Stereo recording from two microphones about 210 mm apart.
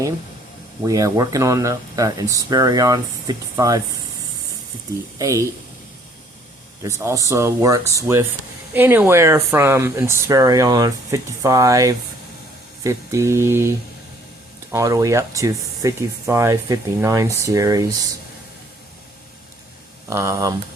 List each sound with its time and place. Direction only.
0.9 s speech: 15° right (ahead or behind)
5.1 s speech: 15° right (ahead or behind)
6.8 s speech: 15° right (ahead or behind)
20.1 s speech: 15° right (ahead or behind)